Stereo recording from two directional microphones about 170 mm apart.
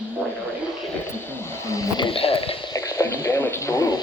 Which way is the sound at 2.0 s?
35° left (ahead or behind).